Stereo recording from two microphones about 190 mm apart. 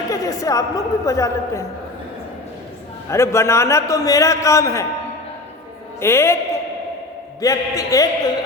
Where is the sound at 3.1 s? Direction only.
15° left (ahead or behind).